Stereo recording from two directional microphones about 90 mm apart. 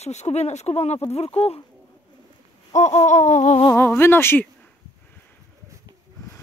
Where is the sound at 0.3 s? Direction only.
45° left (ahead or behind).